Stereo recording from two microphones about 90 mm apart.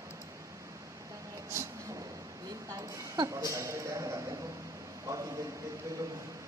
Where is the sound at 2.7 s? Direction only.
40° right (ahead or behind).